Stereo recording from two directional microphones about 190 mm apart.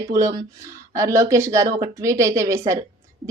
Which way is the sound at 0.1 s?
15° right (ahead or behind).